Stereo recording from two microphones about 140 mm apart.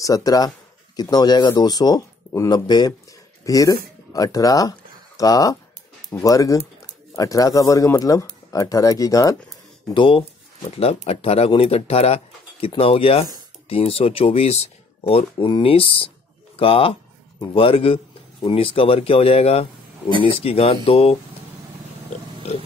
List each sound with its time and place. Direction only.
0.0 s speech: 25° left (ahead or behind)
9.8 s speech: 35° left (ahead or behind)
22.5 s speech: 55° left (ahead or behind)